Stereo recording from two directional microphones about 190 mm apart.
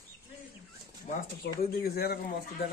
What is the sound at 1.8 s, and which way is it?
Speech, 55° left (ahead or behind).